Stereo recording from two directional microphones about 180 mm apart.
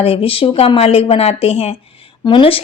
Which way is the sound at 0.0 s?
30° left (ahead or behind).